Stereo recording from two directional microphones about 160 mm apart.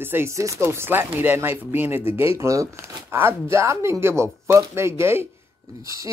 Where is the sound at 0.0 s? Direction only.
15° right (ahead or behind).